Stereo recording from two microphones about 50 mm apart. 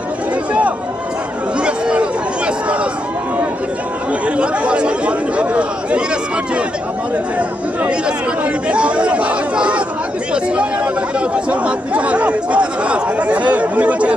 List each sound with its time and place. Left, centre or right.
1.6 s a sound: right
4.4 s chatter: right
8.6 s chatter: right